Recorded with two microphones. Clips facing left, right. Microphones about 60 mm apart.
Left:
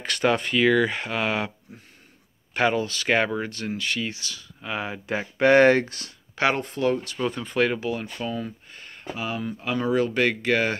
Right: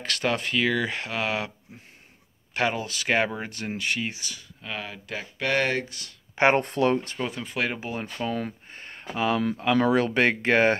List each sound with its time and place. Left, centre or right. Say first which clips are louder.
0.0 s speech: left 4 dB; centre
2.5 s speech: left 4 dB; centre
4.6 s speech: left 5 dB; left
5.7 s speech: left 9 dB; left
6.5 s speech: right 2 dB; right
7.2 s speech: left 5 dB; centre
7.8 s speech: left 2 dB; right
8.6 s a sound: right 2 dB; right
9.1 s speech: right 5 dB; right
9.6 s speech: even; right